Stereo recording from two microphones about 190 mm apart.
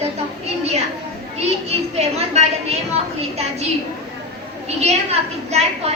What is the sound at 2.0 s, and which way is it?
Speech, 35° right (ahead or behind).